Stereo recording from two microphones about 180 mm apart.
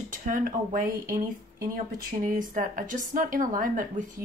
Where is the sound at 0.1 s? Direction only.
50° right (ahead or behind).